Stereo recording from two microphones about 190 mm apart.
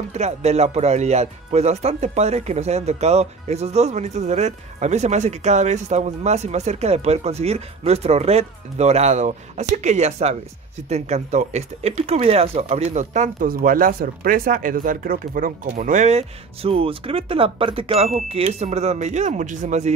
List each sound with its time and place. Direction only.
0.1 s speech: 35° right (ahead or behind)